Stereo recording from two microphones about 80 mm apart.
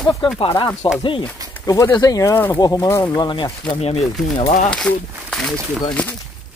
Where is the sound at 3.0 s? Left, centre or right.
Left.